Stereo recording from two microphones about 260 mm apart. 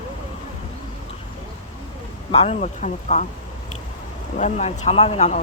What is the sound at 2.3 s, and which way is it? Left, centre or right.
Speech, left.